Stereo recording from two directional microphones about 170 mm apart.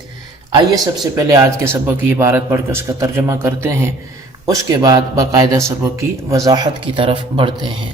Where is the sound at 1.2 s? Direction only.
20° right (ahead or behind).